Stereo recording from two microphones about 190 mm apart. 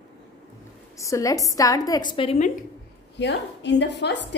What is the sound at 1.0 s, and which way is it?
A woman's voice, 15° left (ahead or behind).